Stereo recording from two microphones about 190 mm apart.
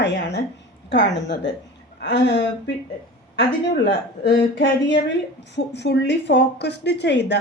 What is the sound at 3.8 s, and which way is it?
Speech, 60° left (ahead or behind).